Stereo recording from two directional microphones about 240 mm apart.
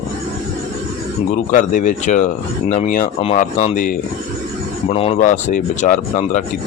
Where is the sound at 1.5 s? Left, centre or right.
Left.